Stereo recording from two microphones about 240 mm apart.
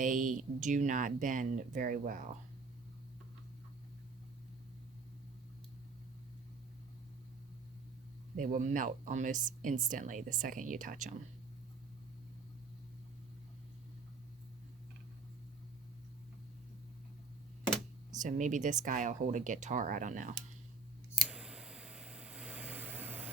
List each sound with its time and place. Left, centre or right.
0.0 s speech: right
8.4 s speech: right
18.2 s speech: right
21.2 s a sound: centre